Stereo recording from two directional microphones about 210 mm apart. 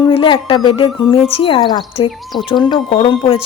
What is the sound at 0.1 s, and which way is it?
A woman's voice, 25° left (ahead or behind).